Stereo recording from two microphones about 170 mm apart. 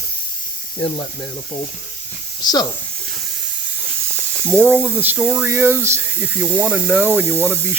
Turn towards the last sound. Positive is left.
turn(degrees=-15)  # may be behind; listen again after turning